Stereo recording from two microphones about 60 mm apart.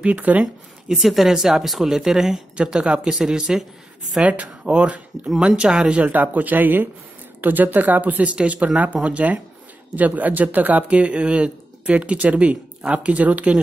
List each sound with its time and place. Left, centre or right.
0.0 s speech: right
0.8 s speech: centre
4.2 s speech: right
6.0 s speech: right